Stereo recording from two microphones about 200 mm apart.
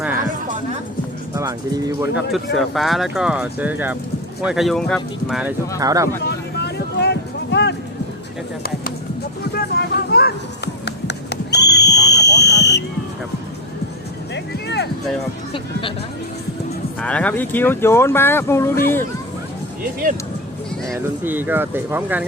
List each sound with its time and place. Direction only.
1.4 s speech: 15° right (ahead or behind)
2.0 s speech: 5° right (ahead or behind)
5.8 s speech: 15° right (ahead or behind)
6.2 s a sound: 55° left (ahead or behind)
9.4 s vehicle: 50° left (ahead or behind)
10.8 s a sound: 55° left (ahead or behind)
14.3 s music: 60° left (ahead or behind)
17.0 s speech: 5° left (ahead or behind)
20.8 s speech: 10° right (ahead or behind)